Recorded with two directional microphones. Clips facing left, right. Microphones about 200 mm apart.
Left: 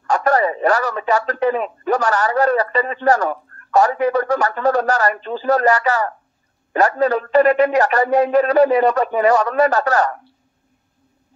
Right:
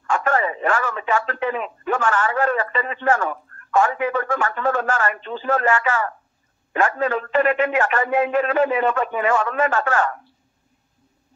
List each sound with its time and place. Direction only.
0.0 s speech: 40° left (ahead or behind)